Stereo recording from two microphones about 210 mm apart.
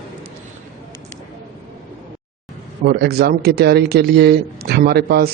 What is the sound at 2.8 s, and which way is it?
Speech, 50° right (ahead or behind).